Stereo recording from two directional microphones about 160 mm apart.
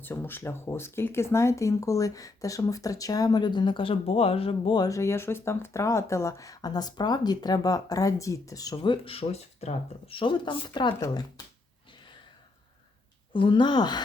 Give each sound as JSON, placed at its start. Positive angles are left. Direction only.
{"t": 0.0, "sound": "speech", "side_deg": 15}
{"t": 13.3, "sound": "speech", "side_deg": 30}